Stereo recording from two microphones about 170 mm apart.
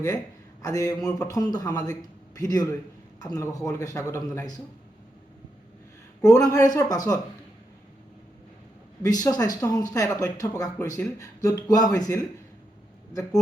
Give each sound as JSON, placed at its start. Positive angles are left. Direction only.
{"t": 0.6, "sound": "speech", "side_deg": 20}
{"t": 6.2, "sound": "speech", "side_deg": 20}
{"t": 9.0, "sound": "speech", "side_deg": 20}